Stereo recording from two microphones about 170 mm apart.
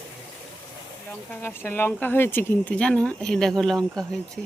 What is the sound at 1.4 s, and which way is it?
Speech, 15° left (ahead or behind).